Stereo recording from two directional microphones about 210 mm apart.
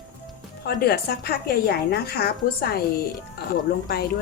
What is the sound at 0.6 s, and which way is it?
A woman's voice, 50° left (ahead or behind).